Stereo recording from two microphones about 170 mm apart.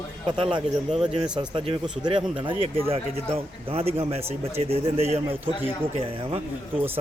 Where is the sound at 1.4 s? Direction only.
30° right (ahead or behind).